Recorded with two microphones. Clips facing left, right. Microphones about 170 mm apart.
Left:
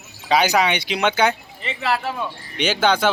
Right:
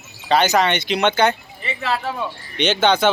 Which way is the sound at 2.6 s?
10° left (ahead or behind).